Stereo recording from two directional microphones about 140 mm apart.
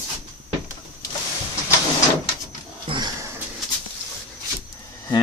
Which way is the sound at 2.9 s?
30° right (ahead or behind).